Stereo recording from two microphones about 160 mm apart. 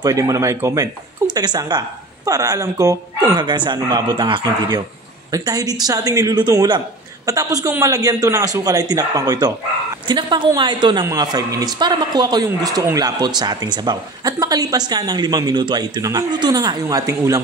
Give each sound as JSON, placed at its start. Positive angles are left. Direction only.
{"t": 0.0, "sound": "a woman's voice", "side_deg": -20}